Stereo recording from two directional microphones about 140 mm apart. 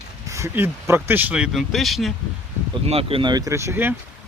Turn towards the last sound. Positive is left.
turn(degrees=-15)  # may be behind; listen again after turning